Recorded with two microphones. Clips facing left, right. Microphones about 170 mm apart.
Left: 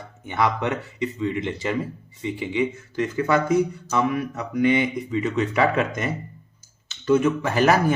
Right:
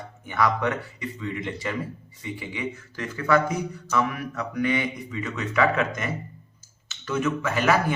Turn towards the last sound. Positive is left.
turn(degrees=35)  # may be behind; listen again after turning